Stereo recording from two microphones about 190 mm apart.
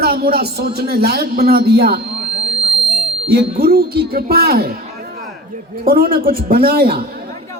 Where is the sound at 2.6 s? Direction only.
30° right (ahead or behind).